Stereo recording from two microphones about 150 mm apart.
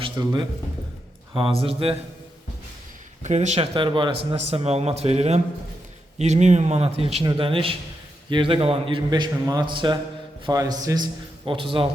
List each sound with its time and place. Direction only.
0.2 s a man's voice: 25° right (ahead or behind)
1.3 s a man's voice: 35° right (ahead or behind)
3.2 s a man's voice: 50° right (ahead or behind)
3.8 s a man's voice: 30° right (ahead or behind)
4.3 s a man's voice: 40° right (ahead or behind)